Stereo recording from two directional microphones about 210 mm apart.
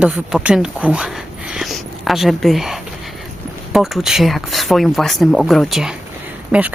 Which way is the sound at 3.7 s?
Centre (ahead or behind).